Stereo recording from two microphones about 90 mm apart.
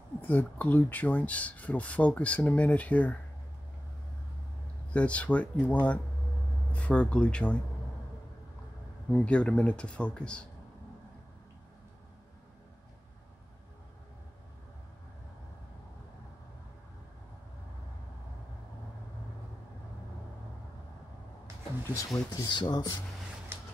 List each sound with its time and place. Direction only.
0.2 s speech: 20° left (ahead or behind)
4.9 s speech: 15° left (ahead or behind)
9.1 s speech: 10° left (ahead or behind)
21.9 s speech: 40° left (ahead or behind)
22.5 s speech: 55° left (ahead or behind)